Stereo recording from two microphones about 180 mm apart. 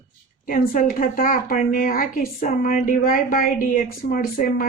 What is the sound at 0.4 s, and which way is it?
Speech, 50° left (ahead or behind).